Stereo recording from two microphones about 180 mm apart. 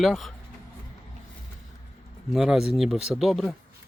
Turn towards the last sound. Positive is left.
turn(degrees=0)  # may be behind; listen again after turning